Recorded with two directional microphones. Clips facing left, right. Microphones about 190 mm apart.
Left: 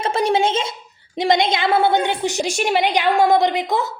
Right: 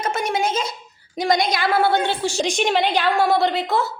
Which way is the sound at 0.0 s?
30° left (ahead or behind).